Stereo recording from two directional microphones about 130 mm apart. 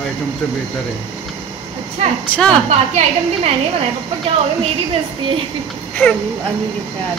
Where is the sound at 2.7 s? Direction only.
55° right (ahead or behind).